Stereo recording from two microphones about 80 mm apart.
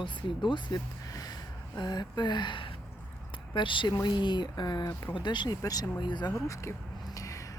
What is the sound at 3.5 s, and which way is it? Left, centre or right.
Speech, left.